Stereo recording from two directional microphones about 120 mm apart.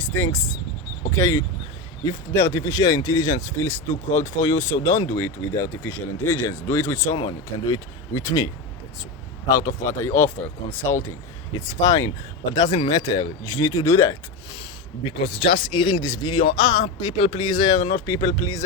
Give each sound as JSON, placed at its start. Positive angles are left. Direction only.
{"t": 0.0, "sound": "speech", "side_deg": 25}
{"t": 7.2, "sound": "speech", "side_deg": 40}
{"t": 9.6, "sound": "speech", "side_deg": 30}
{"t": 11.5, "sound": "speech", "side_deg": 30}
{"t": 15.2, "sound": "speech", "side_deg": 45}